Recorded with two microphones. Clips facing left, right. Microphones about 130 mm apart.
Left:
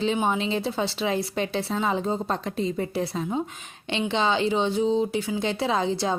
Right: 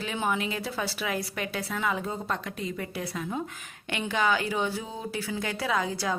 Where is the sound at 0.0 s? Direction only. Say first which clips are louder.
Left 5 dB; 25° left (ahead or behind).